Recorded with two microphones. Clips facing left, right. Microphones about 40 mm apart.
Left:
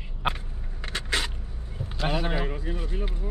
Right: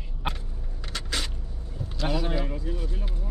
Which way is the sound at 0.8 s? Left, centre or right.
Left.